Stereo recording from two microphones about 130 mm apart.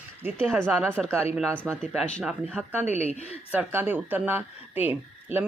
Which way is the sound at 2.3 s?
10° right (ahead or behind).